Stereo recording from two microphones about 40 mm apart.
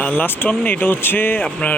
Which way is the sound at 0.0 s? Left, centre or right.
Left.